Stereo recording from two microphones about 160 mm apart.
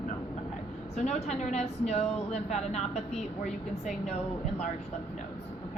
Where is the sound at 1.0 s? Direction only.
45° left (ahead or behind).